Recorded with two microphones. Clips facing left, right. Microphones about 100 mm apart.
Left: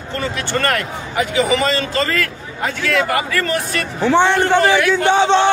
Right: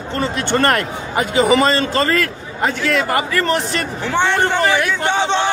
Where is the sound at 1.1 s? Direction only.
40° right (ahead or behind).